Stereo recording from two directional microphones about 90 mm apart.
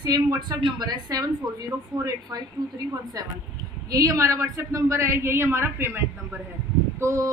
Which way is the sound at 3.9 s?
40° right (ahead or behind).